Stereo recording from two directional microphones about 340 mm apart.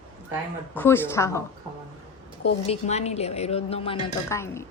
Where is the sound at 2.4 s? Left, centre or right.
Centre.